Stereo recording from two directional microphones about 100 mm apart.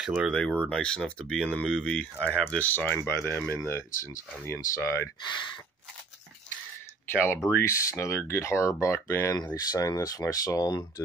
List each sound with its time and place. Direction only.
0.0 s speech: 5° right (ahead or behind)
0.3 s speech: 10° left (ahead or behind); by 5.1 s 30° left (ahead or behind)
5.2 s speech: 50° left (ahead or behind)
7.1 s speech: 20° left (ahead or behind)
9.4 s speech: 40° left (ahead or behind)